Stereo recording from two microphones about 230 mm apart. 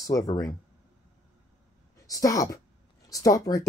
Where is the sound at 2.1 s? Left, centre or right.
Centre.